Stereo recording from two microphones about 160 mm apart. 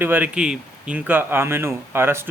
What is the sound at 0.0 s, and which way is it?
Speech, 10° right (ahead or behind).